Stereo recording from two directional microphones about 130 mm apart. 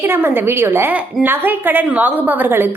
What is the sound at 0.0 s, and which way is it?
A woman's voice, 15° right (ahead or behind).